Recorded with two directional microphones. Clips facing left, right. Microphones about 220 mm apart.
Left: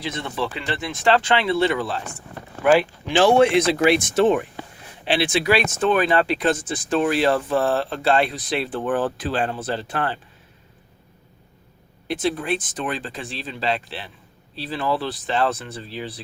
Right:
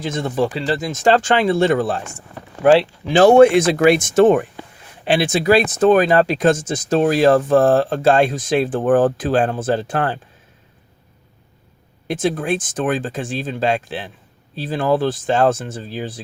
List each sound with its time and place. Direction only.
0.0 s speech: 45° right (ahead or behind)
12.0 s speech: 50° right (ahead or behind)